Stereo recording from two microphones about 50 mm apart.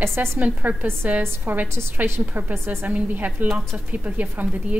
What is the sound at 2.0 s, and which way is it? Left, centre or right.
Speech, right.